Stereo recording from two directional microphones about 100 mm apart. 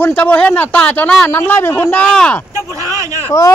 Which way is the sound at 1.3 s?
25° left (ahead or behind).